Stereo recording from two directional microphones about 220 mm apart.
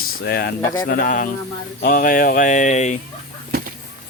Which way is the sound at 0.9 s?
35° left (ahead or behind).